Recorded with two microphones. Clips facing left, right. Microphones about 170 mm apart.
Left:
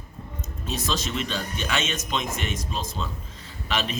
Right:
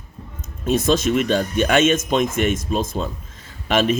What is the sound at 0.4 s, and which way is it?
Speech, 50° right (ahead or behind).